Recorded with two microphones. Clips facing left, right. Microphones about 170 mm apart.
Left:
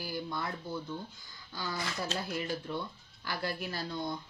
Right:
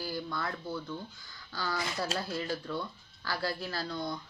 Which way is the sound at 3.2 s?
20° left (ahead or behind).